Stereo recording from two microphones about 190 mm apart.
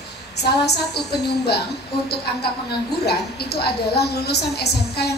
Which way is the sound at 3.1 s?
55° left (ahead or behind).